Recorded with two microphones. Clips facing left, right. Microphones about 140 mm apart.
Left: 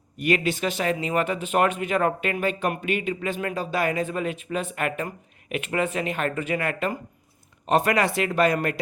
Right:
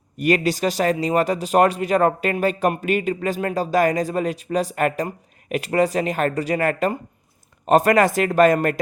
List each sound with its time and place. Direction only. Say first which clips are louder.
0.2 s speech: right 4 dB; 40° right (ahead or behind)